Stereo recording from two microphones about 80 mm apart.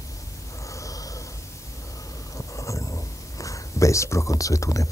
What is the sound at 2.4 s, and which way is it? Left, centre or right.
Speech, left.